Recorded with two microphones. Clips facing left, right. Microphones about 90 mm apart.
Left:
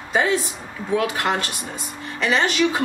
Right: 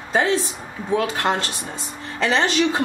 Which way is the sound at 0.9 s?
25° right (ahead or behind).